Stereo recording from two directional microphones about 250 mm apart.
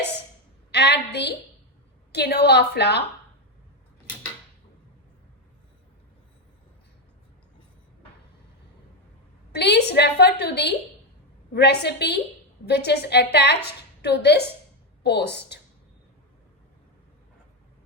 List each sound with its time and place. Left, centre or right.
0.7 s a woman's voice: left
9.5 s a woman's voice: left